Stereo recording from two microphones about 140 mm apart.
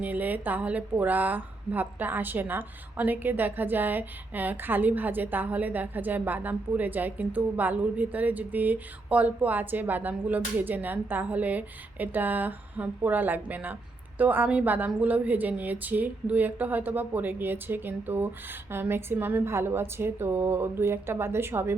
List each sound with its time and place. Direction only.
0.0 s a woman's voice: 10° right (ahead or behind)